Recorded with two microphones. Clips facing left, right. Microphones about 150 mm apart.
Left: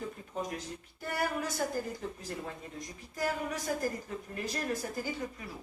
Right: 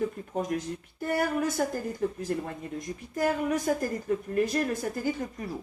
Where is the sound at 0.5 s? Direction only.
55° right (ahead or behind).